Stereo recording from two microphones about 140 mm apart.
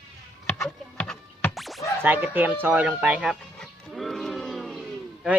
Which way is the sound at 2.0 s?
15° right (ahead or behind).